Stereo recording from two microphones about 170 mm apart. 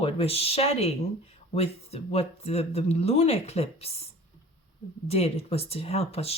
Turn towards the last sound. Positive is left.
turn(degrees=35)  # may be behind; listen again after turning